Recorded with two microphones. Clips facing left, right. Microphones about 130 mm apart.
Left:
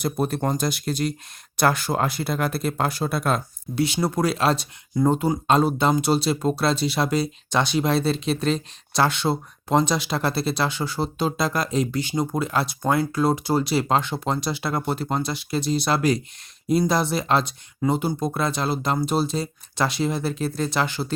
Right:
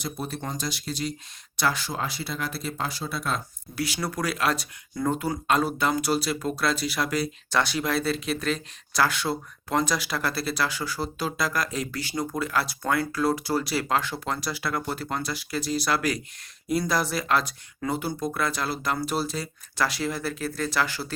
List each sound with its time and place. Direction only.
0.0 s speech: 55° left (ahead or behind)
3.8 s speech: 25° left (ahead or behind)